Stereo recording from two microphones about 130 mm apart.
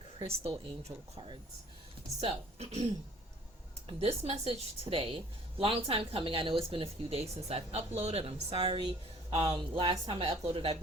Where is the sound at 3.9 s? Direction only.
50° right (ahead or behind).